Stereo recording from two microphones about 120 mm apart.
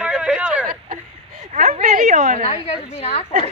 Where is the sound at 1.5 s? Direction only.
85° right.